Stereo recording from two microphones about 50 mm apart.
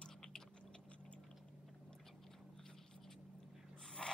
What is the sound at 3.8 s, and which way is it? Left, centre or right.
Snort, centre.